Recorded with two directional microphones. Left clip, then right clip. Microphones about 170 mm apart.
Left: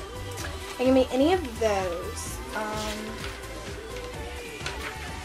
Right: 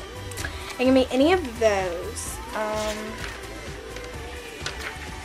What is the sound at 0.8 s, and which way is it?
Speech, 15° right (ahead or behind).